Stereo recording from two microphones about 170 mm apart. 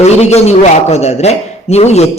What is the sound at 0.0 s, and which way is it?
A man's voice, 40° left (ahead or behind).